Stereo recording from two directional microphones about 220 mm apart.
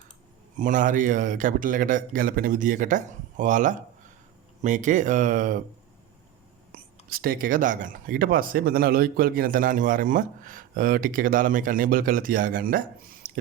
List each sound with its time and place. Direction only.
0.5 s speech: 35° right (ahead or behind)
7.1 s speech: 40° right (ahead or behind)